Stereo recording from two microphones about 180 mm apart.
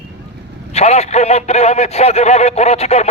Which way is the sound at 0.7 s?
35° left (ahead or behind).